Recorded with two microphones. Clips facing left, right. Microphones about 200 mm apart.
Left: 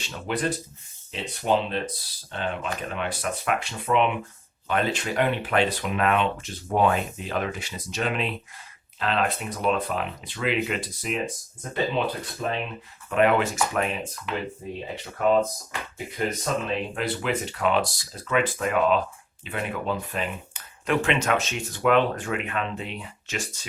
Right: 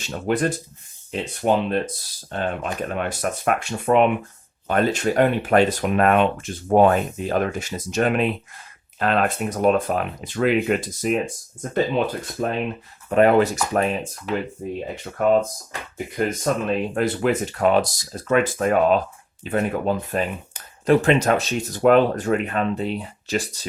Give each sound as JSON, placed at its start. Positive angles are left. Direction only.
{"t": 0.0, "sound": "speech", "side_deg": -45}
{"t": 15.2, "sound": "speech", "side_deg": -50}